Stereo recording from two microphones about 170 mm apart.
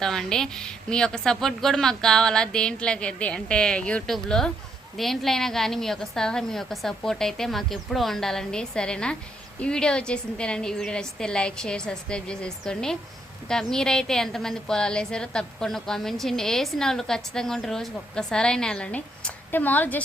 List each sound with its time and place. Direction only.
0.0 s a woman's voice: 5° left (ahead or behind)